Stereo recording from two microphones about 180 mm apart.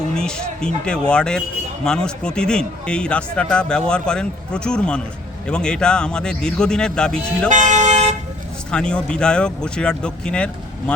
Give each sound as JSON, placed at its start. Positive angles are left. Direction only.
{"t": 0.1, "sound": "speech", "side_deg": 5}
{"t": 7.5, "sound": "vehicle", "side_deg": -45}
{"t": 8.7, "sound": "speech", "side_deg": 5}